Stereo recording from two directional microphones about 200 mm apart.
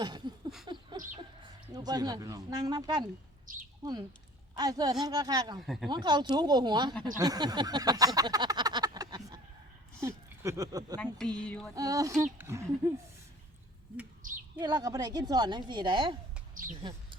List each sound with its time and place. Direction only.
0.0 s a sound: 20° right (ahead or behind)
0.7 s bird: 25° right (ahead or behind)
3.8 s a sound: 20° right (ahead or behind)
4.5 s a woman's voice: 20° right (ahead or behind)
5.5 s speech: centre (ahead or behind)
5.9 s a woman's voice: 20° right (ahead or behind)
7.2 s a sound: 20° right (ahead or behind)
10.0 s speech: 15° right (ahead or behind)
10.9 s speech: 5° left (ahead or behind)
11.7 s a sound: 20° right (ahead or behind)
14.6 s a woman's voice: 20° right (ahead or behind)
16.6 s speech: 40° right (ahead or behind)